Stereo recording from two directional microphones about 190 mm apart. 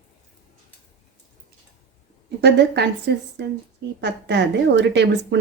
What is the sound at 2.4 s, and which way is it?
A woman's voice, 65° right (ahead or behind).